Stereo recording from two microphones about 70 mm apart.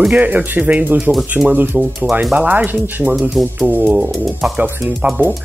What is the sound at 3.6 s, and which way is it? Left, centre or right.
Speech, right.